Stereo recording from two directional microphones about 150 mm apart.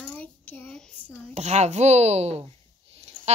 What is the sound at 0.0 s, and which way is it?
Child singing, 10° left (ahead or behind).